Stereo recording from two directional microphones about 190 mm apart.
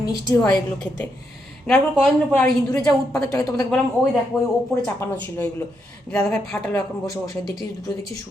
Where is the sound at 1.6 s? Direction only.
Centre (ahead or behind).